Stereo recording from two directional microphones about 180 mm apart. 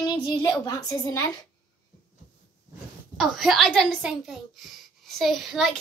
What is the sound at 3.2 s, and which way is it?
A child's voice, centre (ahead or behind).